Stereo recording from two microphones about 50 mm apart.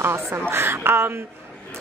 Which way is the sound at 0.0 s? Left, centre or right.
Right.